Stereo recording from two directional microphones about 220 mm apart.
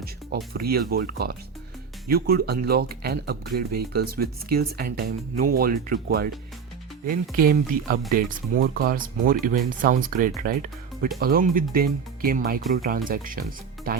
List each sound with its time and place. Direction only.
0.0 s speech: 45° right (ahead or behind)
7.3 s speech: 40° right (ahead or behind)